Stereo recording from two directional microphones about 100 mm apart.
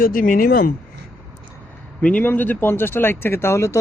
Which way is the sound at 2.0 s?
15° left (ahead or behind).